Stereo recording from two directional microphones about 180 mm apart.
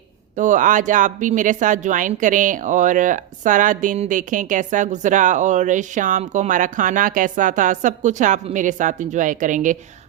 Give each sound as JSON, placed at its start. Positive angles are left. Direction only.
{"t": 0.3, "sound": "speech", "side_deg": -45}